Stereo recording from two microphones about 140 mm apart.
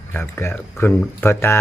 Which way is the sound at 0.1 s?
15° left (ahead or behind).